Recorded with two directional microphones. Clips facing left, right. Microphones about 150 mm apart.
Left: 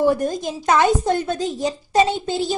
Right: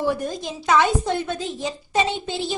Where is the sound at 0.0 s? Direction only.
45° left (ahead or behind).